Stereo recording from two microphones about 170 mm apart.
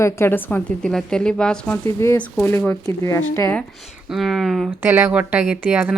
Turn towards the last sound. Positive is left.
turn(degrees=-10)  # may be behind; listen again after turning